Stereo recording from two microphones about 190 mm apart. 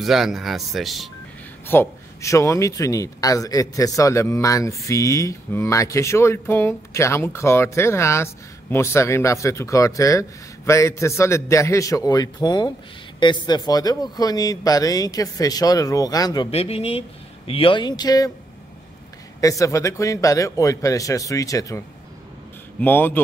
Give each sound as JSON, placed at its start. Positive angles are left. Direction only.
{"t": 0.0, "sound": "speech", "side_deg": 0}
{"t": 1.7, "sound": "a man's voice", "side_deg": 15}
{"t": 19.4, "sound": "a man's voice", "side_deg": 15}